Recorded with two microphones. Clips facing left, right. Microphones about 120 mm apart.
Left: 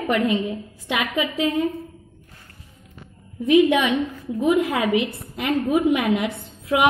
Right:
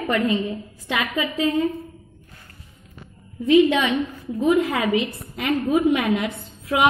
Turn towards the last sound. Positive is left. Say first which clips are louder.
# even
turn(degrees=15)  # may be behind; listen again after turning